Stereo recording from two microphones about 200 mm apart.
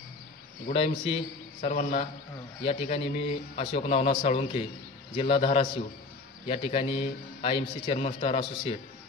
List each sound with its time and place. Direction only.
0.7 s a man's voice: 30° left (ahead or behind)